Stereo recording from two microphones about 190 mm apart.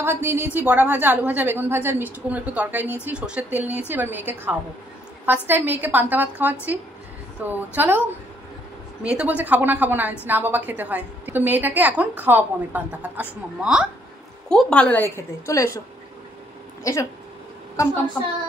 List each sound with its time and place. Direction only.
0.0 s a woman's voice: 10° right (ahead or behind)
9.1 s a woman's voice: 5° right (ahead or behind); by 15.8 s 15° left (ahead or behind)
16.8 s a woman's voice: 15° left (ahead or behind)